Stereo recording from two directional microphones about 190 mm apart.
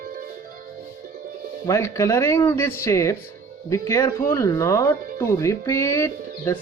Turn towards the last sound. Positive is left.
turn(degrees=15)  # may be behind; listen again after turning